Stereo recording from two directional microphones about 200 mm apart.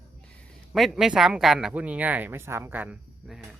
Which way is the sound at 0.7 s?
5° right (ahead or behind).